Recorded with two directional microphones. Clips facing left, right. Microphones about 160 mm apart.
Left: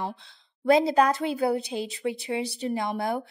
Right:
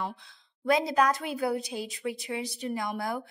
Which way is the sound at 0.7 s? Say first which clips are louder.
Left 4 dB; 30° left (ahead or behind).